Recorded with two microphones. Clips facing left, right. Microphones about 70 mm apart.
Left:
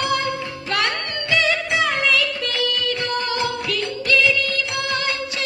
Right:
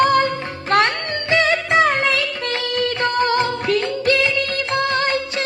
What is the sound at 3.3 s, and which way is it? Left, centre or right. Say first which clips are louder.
Music of bollywood: right 5 dB; right.